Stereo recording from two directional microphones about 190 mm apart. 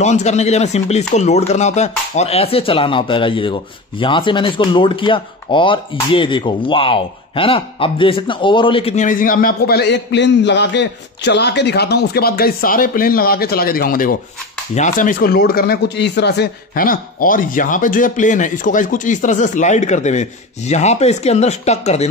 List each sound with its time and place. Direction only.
0.0 s speech: 35° left (ahead or behind)